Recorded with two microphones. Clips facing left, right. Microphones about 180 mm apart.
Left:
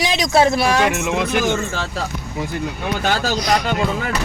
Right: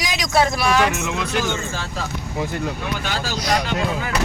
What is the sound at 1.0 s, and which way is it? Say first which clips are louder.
Speech: left 5 dB; 60° left (ahead or behind).